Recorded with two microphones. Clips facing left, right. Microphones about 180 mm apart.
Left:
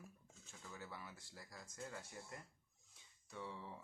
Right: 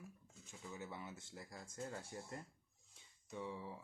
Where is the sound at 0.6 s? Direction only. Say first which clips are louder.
Right 4 dB; 20° right (ahead or behind).